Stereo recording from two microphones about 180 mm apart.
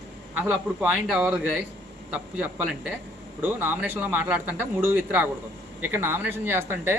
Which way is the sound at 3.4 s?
10° right (ahead or behind).